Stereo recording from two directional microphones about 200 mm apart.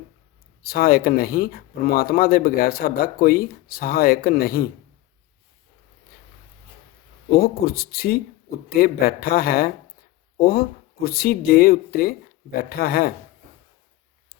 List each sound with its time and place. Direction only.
0.6 s speech: 50° left (ahead or behind)
7.3 s speech: 50° left (ahead or behind)